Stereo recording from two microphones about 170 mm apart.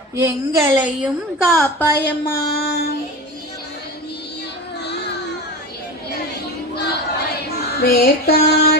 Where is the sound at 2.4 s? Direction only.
70° left (ahead or behind).